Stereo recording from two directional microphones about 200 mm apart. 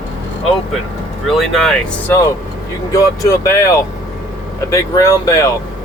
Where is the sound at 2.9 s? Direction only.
15° left (ahead or behind).